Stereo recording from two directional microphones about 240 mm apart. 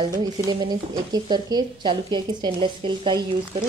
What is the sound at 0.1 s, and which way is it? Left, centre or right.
A woman's voice, centre.